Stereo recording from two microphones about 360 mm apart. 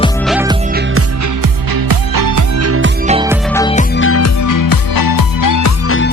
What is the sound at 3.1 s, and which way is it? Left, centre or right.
Music, centre.